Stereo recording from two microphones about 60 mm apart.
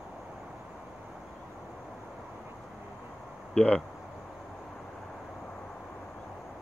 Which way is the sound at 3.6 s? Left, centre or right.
Centre.